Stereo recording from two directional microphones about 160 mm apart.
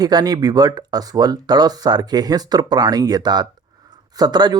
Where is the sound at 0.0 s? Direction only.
25° right (ahead or behind).